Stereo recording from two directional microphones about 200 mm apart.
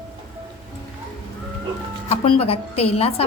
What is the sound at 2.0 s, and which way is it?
A woman's voice, 30° left (ahead or behind).